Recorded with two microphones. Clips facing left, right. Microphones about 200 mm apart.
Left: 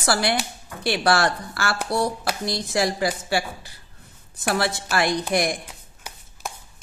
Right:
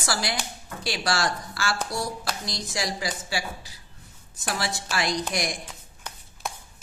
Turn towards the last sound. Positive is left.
turn(degrees=10)  # may be behind; listen again after turning